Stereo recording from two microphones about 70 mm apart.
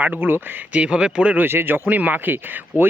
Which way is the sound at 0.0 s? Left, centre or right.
Right.